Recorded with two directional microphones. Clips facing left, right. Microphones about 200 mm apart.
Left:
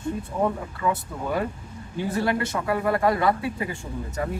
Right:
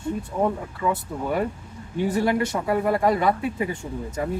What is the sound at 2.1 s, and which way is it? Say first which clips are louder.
Speech: right 1 dB; 20° right (ahead or behind).